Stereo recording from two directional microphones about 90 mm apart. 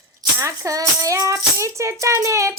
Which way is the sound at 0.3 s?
35° right (ahead or behind).